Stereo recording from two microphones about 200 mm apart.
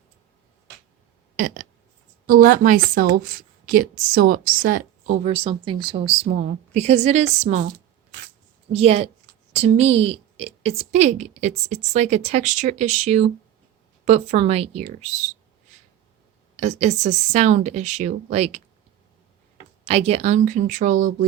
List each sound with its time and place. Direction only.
1.4 s a sound: 45° right (ahead or behind)
2.2 s a woman's voice: 45° right (ahead or behind)
8.7 s a woman's voice: 30° right (ahead or behind)
16.6 s a woman's voice: 35° right (ahead or behind)
19.9 s a woman's voice: 30° right (ahead or behind)